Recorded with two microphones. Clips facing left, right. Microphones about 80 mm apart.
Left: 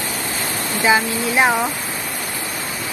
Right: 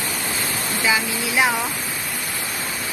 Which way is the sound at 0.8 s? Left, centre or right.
Left.